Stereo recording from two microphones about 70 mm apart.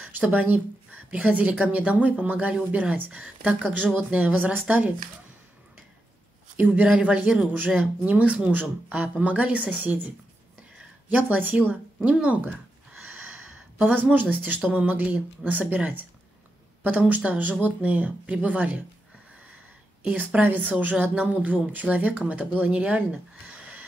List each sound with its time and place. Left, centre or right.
0.0 s speech: right
6.5 s speech: right
6.9 s speech: centre
13.0 s a sound: right
14.3 s speech: right
20.0 s speech: centre